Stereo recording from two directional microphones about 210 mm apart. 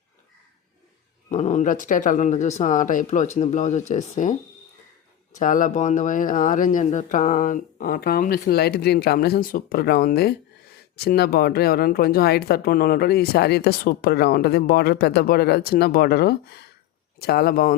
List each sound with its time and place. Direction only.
1.3 s speech: 35° left (ahead or behind)
5.4 s speech: 40° left (ahead or behind)